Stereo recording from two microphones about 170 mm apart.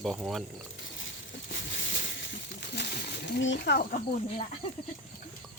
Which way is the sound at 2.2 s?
85° left.